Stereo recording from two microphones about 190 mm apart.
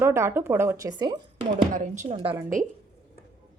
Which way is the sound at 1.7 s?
40° right (ahead or behind).